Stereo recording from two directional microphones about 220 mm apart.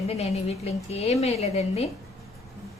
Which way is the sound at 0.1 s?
30° left (ahead or behind).